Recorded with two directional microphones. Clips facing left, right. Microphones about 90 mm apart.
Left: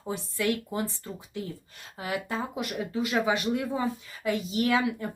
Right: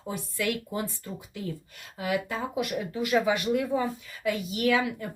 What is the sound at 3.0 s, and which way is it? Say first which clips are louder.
Speech: right 2 dB; 20° left (ahead or behind).